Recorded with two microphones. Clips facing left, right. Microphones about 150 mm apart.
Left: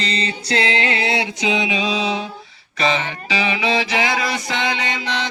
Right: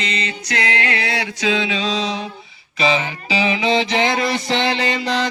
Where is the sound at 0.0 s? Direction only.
35° left (ahead or behind); by 2.2 s 10° left (ahead or behind).